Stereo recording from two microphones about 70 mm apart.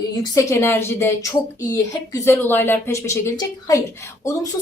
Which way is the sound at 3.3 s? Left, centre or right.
Left.